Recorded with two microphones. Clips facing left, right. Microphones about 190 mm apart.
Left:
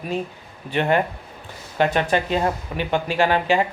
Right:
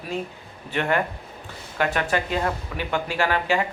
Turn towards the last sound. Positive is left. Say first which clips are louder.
# left 4 dB
turn(degrees=20)  # may be behind; listen again after turning